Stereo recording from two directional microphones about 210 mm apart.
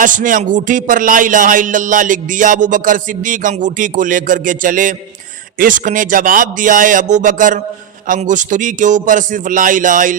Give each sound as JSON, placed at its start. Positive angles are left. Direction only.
{"t": 0.0, "sound": "speech", "side_deg": -40}